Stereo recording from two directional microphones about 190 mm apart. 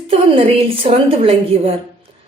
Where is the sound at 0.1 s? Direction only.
30° right (ahead or behind).